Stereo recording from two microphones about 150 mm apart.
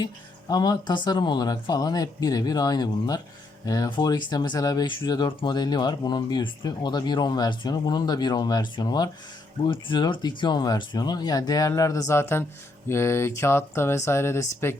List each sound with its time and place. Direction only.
0.0 s speech: 25° left (ahead or behind)